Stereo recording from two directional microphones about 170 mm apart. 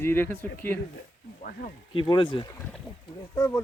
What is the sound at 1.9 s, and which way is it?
Speech, 30° left (ahead or behind).